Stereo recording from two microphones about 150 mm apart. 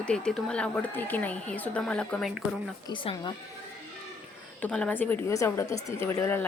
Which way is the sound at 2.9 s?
30° left (ahead or behind).